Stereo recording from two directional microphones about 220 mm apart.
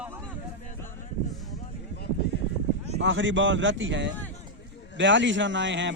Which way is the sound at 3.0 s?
55° right (ahead or behind).